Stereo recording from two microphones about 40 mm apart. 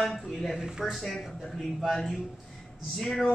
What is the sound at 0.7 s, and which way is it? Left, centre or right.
Speech, centre.